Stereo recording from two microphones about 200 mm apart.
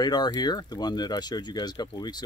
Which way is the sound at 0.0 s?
20° left (ahead or behind).